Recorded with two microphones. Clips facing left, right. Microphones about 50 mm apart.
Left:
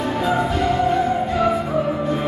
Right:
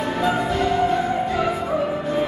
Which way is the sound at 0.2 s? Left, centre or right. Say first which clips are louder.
Even; centre.